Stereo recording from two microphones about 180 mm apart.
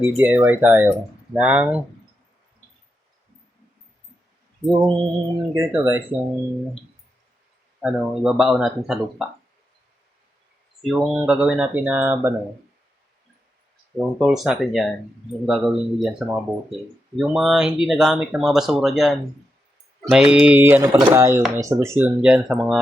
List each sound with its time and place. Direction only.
0.0 s speech: 10° right (ahead or behind)
4.6 s mantra: 20° right (ahead or behind)
5.5 s speech: 15° right (ahead or behind)
7.8 s speech: 5° right (ahead or behind)
10.8 s speech: centre (ahead or behind)
13.9 s speech: centre (ahead or behind)